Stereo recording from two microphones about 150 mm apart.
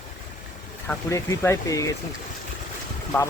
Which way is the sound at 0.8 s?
20° left (ahead or behind).